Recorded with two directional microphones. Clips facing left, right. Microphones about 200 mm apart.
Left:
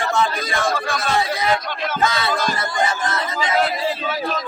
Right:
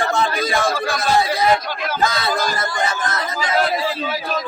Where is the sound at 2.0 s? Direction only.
35° right (ahead or behind).